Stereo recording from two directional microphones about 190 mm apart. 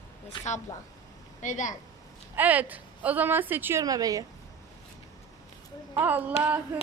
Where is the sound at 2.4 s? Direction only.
10° right (ahead or behind).